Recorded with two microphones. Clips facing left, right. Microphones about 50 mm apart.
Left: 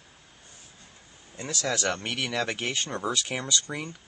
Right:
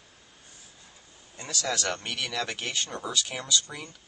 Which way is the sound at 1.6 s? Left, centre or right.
Centre.